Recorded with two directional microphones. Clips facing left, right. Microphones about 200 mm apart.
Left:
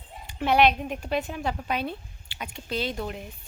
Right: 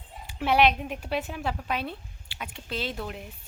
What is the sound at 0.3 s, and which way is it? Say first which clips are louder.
A woman's voice: left 1 dB; 5° right (ahead or behind).